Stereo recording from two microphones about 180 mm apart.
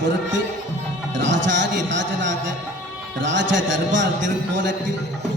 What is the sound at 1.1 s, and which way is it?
Music, 90° right.